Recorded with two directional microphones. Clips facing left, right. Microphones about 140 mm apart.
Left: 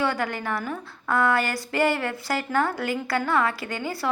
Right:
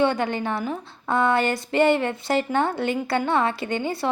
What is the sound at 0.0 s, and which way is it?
A woman's voice, 25° right (ahead or behind).